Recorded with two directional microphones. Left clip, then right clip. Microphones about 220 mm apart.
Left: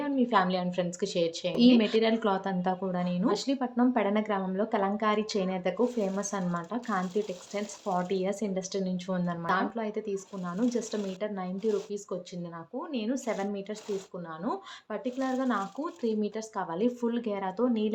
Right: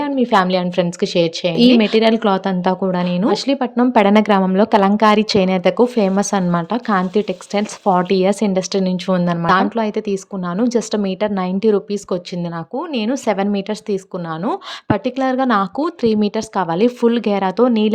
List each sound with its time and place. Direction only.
0.0 s a woman's voice: 40° right (ahead or behind)